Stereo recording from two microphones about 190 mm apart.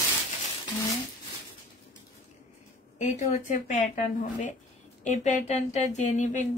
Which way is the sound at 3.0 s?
35° left (ahead or behind).